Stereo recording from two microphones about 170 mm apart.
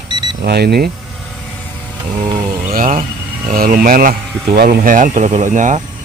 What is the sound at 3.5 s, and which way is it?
Speech, 55° right (ahead or behind).